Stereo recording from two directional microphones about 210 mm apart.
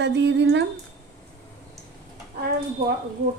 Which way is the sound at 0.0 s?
55° right (ahead or behind).